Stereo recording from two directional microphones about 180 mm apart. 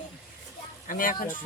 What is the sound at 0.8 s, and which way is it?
Speech, 50° left (ahead or behind).